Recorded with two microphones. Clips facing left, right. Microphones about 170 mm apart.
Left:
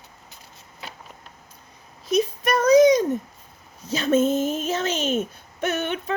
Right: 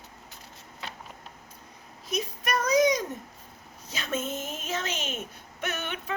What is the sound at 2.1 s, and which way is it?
Speech, 30° left (ahead or behind).